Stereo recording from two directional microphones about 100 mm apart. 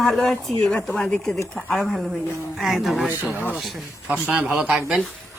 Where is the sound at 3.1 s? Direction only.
20° right (ahead or behind).